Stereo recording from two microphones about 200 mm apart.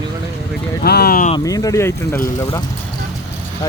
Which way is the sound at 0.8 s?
50° left (ahead or behind).